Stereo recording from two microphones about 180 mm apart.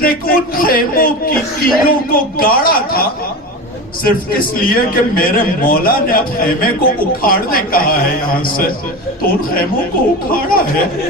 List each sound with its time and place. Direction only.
0.0 s a man's voice: 55° left (ahead or behind)